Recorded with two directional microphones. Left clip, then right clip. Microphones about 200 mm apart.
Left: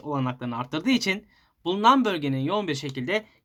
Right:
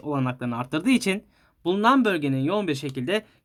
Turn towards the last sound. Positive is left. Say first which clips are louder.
# right 1 dB
turn(degrees=-25)  # may be behind; listen again after turning